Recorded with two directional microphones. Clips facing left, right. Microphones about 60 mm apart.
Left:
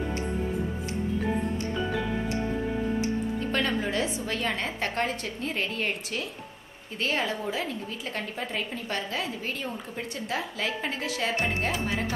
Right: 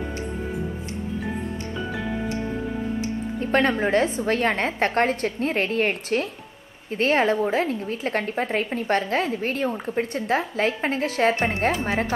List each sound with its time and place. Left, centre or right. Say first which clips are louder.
3.3 s a woman's voice: right 6 dB; right